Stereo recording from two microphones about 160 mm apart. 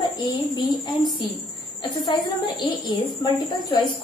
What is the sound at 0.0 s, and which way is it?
A woman's voice, 30° left (ahead or behind).